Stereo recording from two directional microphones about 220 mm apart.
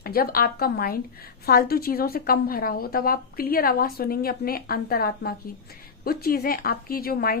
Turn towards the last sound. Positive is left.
turn(degrees=45)  # may be behind; listen again after turning